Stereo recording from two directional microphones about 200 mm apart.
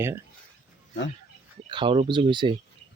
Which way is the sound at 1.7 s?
25° right (ahead or behind).